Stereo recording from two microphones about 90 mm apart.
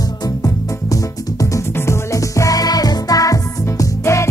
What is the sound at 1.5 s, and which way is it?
Music, 30° left (ahead or behind).